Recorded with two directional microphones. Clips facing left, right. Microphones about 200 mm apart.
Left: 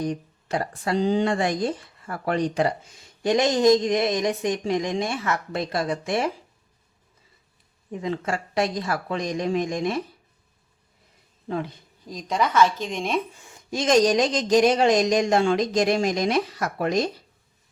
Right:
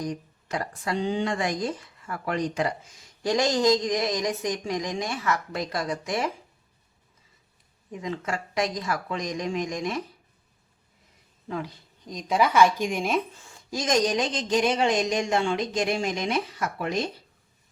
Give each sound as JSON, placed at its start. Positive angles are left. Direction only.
{"t": 0.0, "sound": "speech", "side_deg": 30}
{"t": 7.9, "sound": "speech", "side_deg": 30}
{"t": 11.4, "sound": "speech", "side_deg": 25}
{"t": 12.0, "sound": "speech", "side_deg": 0}
{"t": 13.4, "sound": "speech", "side_deg": 20}